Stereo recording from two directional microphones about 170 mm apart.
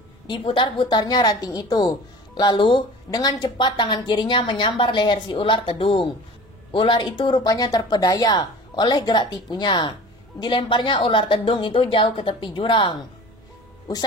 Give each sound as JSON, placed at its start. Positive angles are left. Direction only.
{"t": 0.3, "sound": "a woman's voice", "side_deg": 30}